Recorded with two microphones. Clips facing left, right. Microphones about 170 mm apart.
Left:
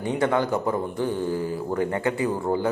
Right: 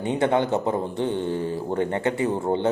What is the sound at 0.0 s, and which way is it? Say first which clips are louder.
A man's voice: right 1 dB; 25° right (ahead or behind).